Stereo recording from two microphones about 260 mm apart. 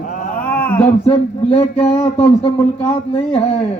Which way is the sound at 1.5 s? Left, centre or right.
Left.